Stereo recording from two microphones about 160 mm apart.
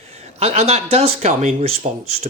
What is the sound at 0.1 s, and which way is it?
Speech, 40° right (ahead or behind).